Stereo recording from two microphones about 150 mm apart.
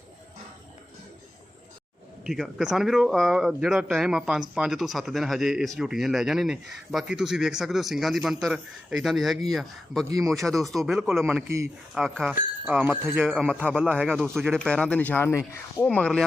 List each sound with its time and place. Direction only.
2.2 s speech: 5° right (ahead or behind)
11.4 s speech: 20° right (ahead or behind)
11.9 s speech: centre (ahead or behind)